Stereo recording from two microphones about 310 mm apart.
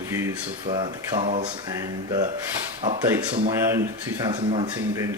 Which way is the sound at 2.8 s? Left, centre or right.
Centre.